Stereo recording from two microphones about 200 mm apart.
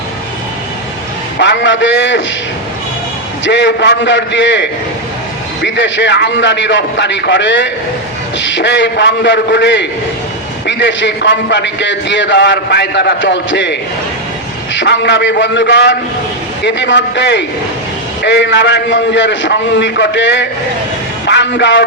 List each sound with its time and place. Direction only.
1.4 s a man's voice: 60° left (ahead or behind)
3.4 s a man's voice: 60° left (ahead or behind)